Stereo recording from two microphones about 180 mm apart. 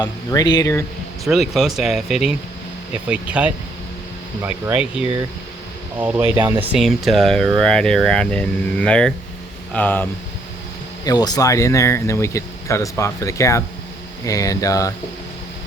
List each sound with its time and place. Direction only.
0.0 s speech: 20° left (ahead or behind)
1.2 s speech: centre (ahead or behind)
6.2 s speech: 25° right (ahead or behind)
6.6 s speech: centre (ahead or behind)
11.0 s speech: 20° left (ahead or behind)